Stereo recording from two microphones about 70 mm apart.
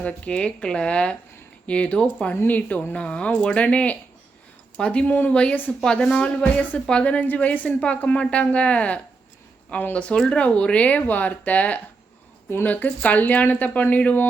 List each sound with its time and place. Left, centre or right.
0.0 s a woman's voice: centre
2.3 s a woman's voice: left